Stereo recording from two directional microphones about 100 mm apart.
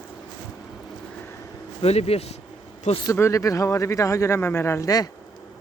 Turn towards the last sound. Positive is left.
turn(degrees=35)  # may be behind; listen again after turning